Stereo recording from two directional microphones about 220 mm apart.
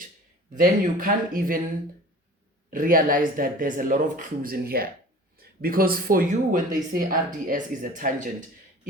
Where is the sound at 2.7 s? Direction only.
40° right (ahead or behind).